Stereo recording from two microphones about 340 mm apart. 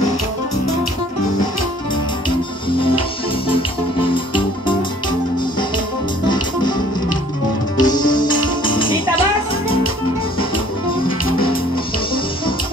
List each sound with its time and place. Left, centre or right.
4.1 s music: centre
6.2 s music: centre
7.8 s music: centre